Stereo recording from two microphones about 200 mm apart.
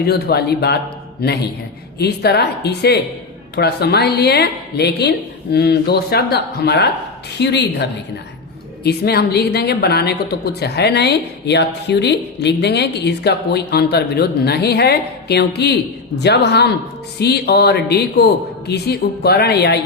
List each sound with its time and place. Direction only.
0.0 s a woman's voice: 55° left (ahead or behind)